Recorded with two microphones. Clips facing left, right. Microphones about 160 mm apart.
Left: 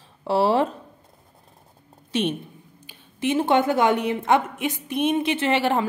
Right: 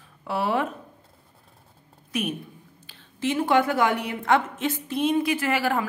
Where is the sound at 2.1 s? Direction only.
30° left (ahead or behind).